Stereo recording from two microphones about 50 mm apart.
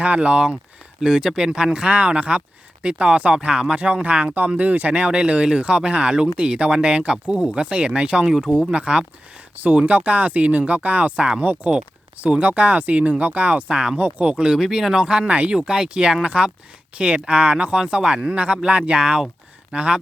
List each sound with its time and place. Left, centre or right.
0.0 s speech: right